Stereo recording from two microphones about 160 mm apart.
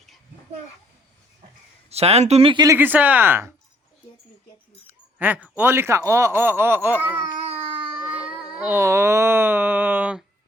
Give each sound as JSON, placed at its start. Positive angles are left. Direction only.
{"t": 1.9, "sound": "speech", "side_deg": -40}
{"t": 2.6, "sound": "speech", "side_deg": -10}
{"t": 5.2, "sound": "speech", "side_deg": -10}
{"t": 8.4, "sound": "a sound", "side_deg": -10}